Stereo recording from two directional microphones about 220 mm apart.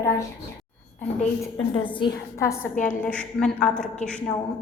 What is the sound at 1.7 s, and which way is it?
A woman's voice, 20° left (ahead or behind).